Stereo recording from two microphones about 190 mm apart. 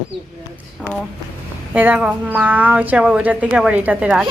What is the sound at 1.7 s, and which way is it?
Speech, 10° right (ahead or behind).